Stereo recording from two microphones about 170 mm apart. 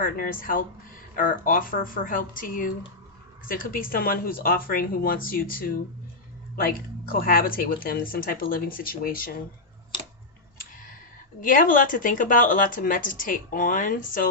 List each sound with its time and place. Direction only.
0.0 s speech: 55° left (ahead or behind)
11.3 s speech: 55° left (ahead or behind)